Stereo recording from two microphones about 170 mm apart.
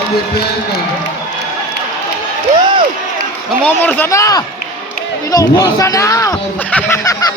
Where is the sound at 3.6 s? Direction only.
10° left (ahead or behind).